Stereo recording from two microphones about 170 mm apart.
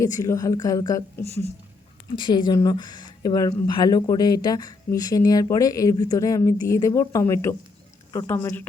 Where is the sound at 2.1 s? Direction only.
25° left (ahead or behind).